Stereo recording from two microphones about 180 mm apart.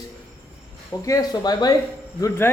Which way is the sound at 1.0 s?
20° left (ahead or behind).